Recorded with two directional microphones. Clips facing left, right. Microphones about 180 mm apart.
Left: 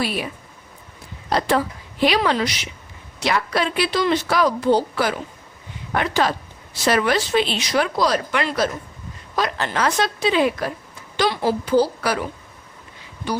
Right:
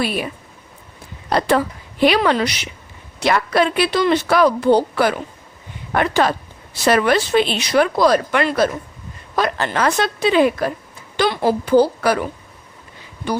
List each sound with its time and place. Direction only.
0.0 s a woman's voice: 50° right (ahead or behind)
1.3 s a woman's voice: 60° right (ahead or behind)